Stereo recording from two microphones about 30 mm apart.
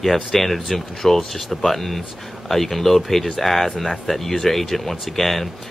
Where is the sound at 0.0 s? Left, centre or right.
Centre.